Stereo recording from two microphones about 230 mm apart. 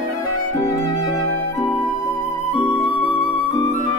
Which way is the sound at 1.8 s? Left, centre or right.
Right.